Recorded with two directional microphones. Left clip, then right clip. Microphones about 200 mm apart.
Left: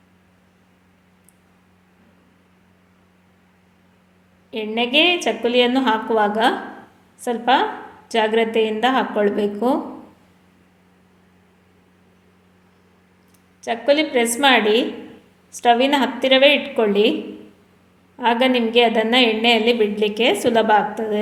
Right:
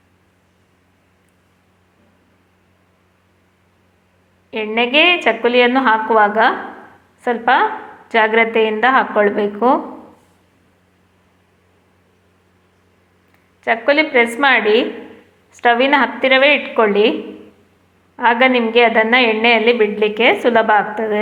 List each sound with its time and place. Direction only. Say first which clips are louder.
4.7 s a woman's voice: right 4 dB; 10° left (ahead or behind)
13.7 s a woman's voice: right 4 dB; 10° left (ahead or behind)
18.2 s a woman's voice: right 5 dB; 10° left (ahead or behind)